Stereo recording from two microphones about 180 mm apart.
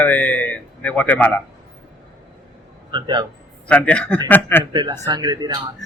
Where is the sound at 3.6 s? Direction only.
5° left (ahead or behind).